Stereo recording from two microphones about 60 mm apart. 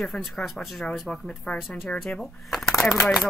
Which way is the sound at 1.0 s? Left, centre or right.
Centre.